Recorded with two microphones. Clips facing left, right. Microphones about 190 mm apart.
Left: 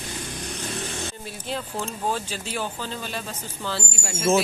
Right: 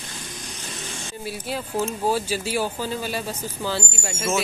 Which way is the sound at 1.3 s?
5° right (ahead or behind).